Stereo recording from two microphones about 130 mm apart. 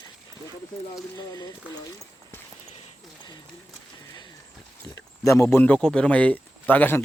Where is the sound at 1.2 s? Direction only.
30° left (ahead or behind).